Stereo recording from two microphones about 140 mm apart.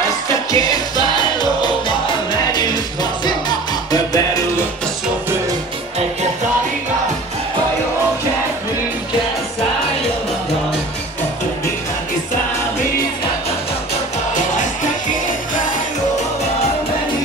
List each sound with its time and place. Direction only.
0.3 s music: 25° left (ahead or behind)
2.5 s music: 30° left (ahead or behind)